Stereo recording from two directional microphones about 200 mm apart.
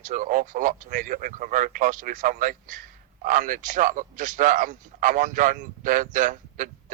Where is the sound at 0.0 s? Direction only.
40° right (ahead or behind).